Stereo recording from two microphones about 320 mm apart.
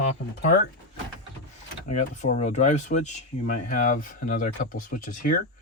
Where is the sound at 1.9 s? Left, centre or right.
Left.